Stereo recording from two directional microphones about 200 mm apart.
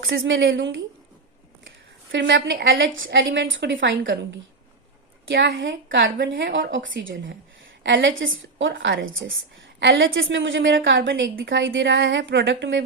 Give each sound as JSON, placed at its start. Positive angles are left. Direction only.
{"t": 0.0, "sound": "a woman's voice", "side_deg": -70}
{"t": 2.1, "sound": "a woman's voice", "side_deg": -65}
{"t": 5.3, "sound": "a woman's voice", "side_deg": -65}